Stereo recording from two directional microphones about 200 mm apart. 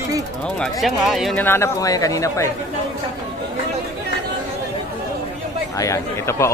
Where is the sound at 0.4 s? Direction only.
Centre (ahead or behind).